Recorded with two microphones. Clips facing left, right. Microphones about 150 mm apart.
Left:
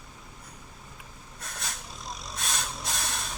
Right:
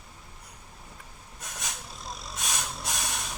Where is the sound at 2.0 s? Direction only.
Centre (ahead or behind).